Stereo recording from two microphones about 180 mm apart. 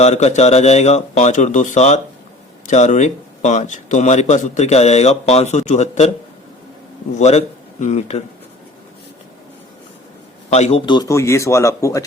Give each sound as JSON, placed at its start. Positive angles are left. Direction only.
{"t": 0.0, "sound": "speech", "side_deg": 40}
{"t": 7.2, "sound": "a man's voice", "side_deg": 40}
{"t": 10.5, "sound": "a man's voice", "side_deg": 35}